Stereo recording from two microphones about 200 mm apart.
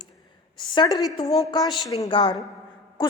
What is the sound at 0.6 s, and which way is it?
A woman's voice, 25° left (ahead or behind).